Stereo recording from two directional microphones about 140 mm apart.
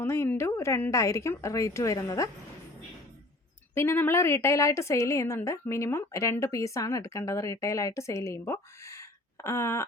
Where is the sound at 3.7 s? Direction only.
20° left (ahead or behind).